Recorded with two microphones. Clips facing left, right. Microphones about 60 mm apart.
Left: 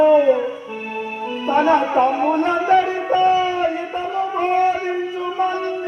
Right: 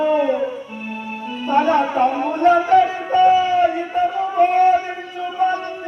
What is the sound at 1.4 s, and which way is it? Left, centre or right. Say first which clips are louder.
Music: left 1 dB; centre.